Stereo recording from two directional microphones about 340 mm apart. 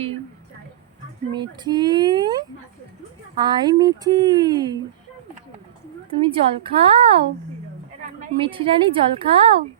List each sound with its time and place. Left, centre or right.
1.3 s speech: centre
6.2 s speech: centre
8.4 s speech: centre